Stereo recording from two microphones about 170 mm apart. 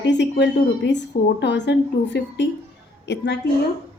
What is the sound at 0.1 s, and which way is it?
A woman's voice, 90° left.